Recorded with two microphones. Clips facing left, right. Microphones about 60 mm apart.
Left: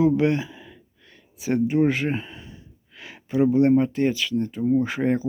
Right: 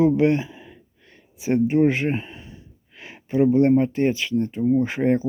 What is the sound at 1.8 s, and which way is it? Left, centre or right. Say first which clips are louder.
Speech: right 2 dB; right.